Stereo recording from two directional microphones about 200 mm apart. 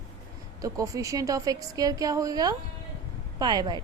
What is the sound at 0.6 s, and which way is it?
A woman's voice, 15° right (ahead or behind).